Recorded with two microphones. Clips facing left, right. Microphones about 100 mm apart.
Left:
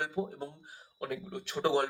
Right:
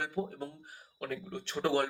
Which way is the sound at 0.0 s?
15° left (ahead or behind).